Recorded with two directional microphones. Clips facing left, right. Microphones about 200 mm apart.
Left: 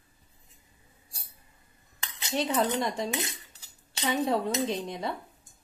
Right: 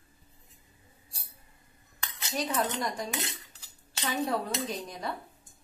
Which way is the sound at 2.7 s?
25° left (ahead or behind).